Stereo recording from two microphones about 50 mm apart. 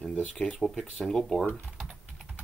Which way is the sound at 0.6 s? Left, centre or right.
Centre.